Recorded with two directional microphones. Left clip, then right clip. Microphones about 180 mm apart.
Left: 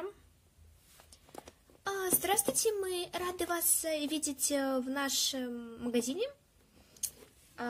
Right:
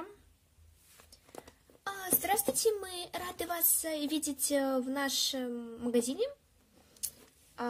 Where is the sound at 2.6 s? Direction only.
5° left (ahead or behind).